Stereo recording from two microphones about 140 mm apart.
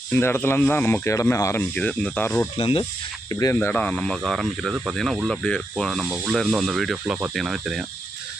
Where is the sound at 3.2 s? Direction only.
25° left (ahead or behind); by 7.8 s 5° right (ahead or behind).